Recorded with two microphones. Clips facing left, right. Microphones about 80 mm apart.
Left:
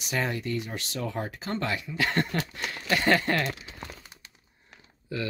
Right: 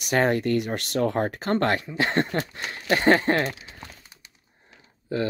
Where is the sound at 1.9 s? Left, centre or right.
Right.